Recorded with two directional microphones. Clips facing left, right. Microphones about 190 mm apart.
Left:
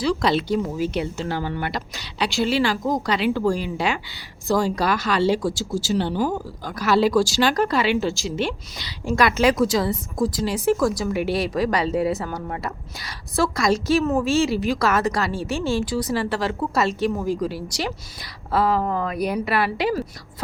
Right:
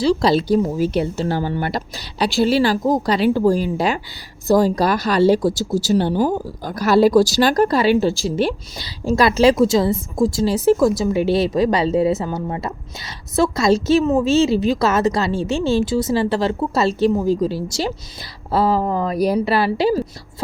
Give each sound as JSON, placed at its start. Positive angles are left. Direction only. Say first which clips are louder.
{"t": 0.0, "sound": "a woman's voice", "louder": "right 5 dB", "side_deg": -30}